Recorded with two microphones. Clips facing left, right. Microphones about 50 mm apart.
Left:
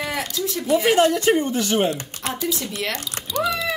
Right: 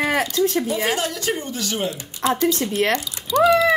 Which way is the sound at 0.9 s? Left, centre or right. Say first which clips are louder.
Left 7 dB; left.